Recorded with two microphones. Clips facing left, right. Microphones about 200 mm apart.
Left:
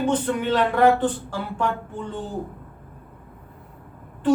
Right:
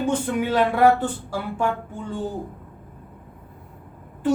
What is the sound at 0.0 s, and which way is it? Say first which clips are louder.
Speech: even; 10° right (ahead or behind).